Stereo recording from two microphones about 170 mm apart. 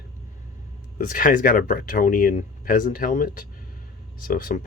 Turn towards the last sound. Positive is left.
turn(degrees=55)  # may be behind; listen again after turning